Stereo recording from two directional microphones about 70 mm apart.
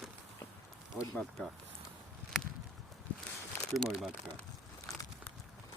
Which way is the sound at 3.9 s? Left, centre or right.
Centre.